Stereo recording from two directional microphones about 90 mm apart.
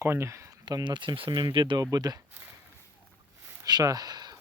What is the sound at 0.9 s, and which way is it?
Speech, 60° right (ahead or behind).